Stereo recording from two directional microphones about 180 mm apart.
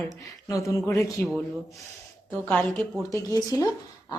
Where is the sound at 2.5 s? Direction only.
10° left (ahead or behind).